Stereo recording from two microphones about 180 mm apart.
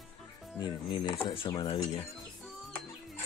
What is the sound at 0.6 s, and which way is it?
Speech, 25° left (ahead or behind).